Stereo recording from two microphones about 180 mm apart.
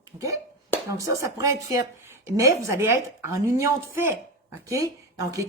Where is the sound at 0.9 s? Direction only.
20° right (ahead or behind).